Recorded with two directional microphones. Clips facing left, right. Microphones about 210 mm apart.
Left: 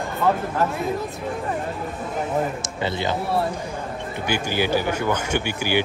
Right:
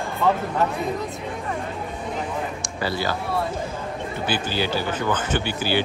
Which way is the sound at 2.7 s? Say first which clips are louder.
Even; 20° left (ahead or behind).